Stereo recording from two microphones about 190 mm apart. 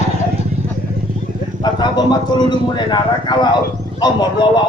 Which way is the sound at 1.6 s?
25° left (ahead or behind).